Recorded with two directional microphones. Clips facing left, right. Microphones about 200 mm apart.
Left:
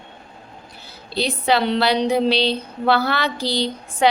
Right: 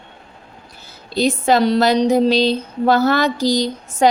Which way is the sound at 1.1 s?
45° right (ahead or behind).